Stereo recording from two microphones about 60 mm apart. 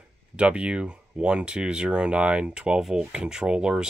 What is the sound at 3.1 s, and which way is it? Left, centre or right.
Rub, centre.